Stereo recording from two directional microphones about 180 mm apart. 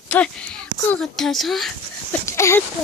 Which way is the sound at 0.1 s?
5° left (ahead or behind).